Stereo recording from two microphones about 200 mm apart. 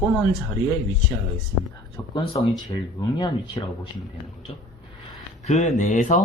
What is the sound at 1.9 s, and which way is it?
Speech, 25° left (ahead or behind).